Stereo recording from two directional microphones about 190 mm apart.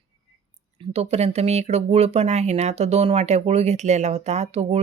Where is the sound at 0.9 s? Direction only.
35° right (ahead or behind).